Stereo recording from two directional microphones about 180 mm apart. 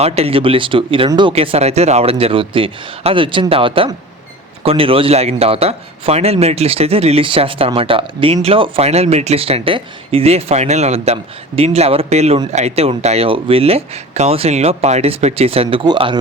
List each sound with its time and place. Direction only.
0.0 s speech: 35° right (ahead or behind)